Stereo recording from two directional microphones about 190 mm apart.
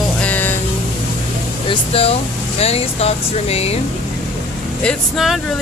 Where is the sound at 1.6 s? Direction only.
30° left (ahead or behind).